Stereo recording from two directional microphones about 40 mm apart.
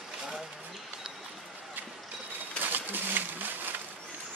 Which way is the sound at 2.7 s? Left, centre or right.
Right.